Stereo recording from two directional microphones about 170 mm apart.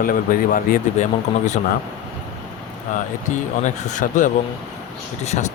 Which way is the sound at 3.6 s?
45° left (ahead or behind).